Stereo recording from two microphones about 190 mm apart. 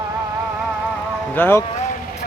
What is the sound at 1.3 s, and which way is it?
Speech, 10° left (ahead or behind).